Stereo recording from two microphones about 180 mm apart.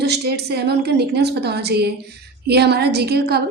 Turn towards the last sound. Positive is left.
turn(degrees=-60)  # may be behind; listen again after turning